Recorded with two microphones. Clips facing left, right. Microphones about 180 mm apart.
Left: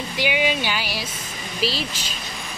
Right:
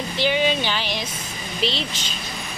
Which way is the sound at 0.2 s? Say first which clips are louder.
Right 1 dB; 10° left (ahead or behind).